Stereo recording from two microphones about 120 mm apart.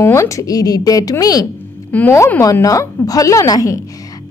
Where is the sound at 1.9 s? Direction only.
15° left (ahead or behind).